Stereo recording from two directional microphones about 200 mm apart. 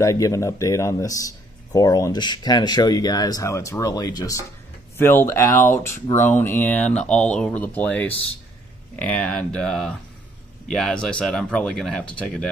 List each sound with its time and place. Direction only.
0.0 s speech: 15° left (ahead or behind)